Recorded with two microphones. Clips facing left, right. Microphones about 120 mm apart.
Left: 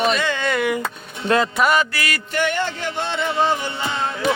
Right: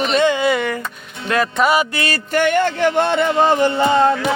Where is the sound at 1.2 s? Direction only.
25° left (ahead or behind).